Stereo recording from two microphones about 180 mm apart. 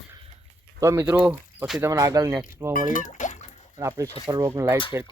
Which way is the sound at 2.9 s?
45° left (ahead or behind).